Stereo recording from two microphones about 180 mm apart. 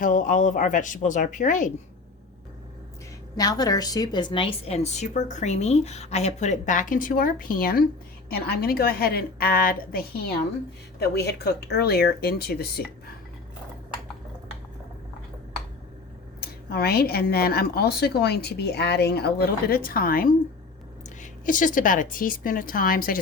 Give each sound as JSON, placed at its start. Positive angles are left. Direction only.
{"t": 0.0, "sound": "a woman's voice", "side_deg": 45}
{"t": 3.3, "sound": "a woman's voice", "side_deg": 20}
{"t": 11.0, "sound": "a woman's voice", "side_deg": 65}
{"t": 16.6, "sound": "a woman's voice", "side_deg": 60}